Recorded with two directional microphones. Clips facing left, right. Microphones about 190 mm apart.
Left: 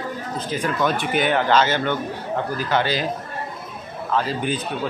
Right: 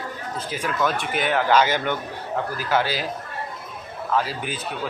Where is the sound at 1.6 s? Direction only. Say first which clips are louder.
Left 1 dB; 10° right (ahead or behind).